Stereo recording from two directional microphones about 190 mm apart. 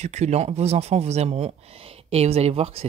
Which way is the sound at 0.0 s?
35° right (ahead or behind).